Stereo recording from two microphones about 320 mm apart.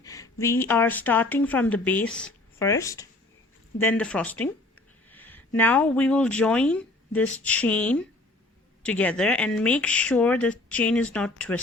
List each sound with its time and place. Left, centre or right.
0.0 s speech: centre